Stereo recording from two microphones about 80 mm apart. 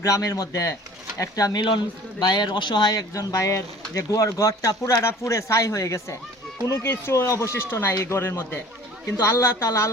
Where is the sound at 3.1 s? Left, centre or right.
Left.